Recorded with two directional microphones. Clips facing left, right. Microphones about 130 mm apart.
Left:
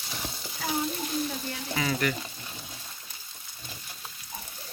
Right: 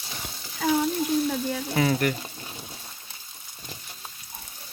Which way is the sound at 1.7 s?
40° right (ahead or behind).